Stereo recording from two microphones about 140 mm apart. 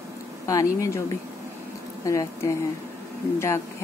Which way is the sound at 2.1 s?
20° left (ahead or behind).